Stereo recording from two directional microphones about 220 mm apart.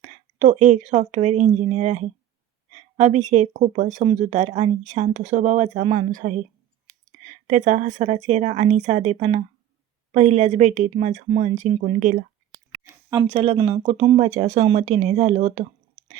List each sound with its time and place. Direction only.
0.0 s a woman's voice: 30° right (ahead or behind)
13.1 s speech: 15° right (ahead or behind)
13.3 s speech: 25° right (ahead or behind)